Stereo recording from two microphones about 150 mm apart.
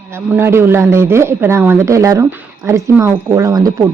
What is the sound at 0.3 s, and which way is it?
Speech, 15° right (ahead or behind).